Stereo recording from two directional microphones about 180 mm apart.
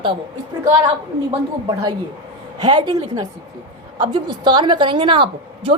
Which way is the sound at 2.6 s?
25° right (ahead or behind).